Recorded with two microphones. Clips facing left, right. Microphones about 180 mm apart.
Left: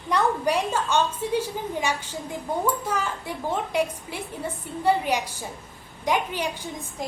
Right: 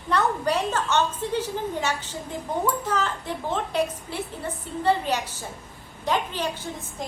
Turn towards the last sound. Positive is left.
turn(degrees=10)  # may be behind; listen again after turning